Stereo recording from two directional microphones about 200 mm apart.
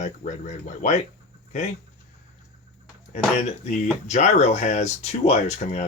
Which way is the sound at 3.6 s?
35° left (ahead or behind).